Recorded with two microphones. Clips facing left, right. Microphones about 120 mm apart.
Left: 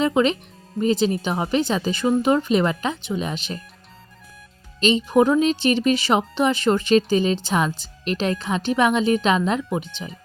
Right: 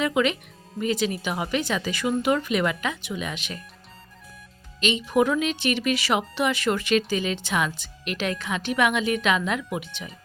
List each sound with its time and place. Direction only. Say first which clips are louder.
0.0 s a woman's voice: left 4 dB; 30° left (ahead or behind)
4.8 s a woman's voice: left 5 dB; 35° left (ahead or behind)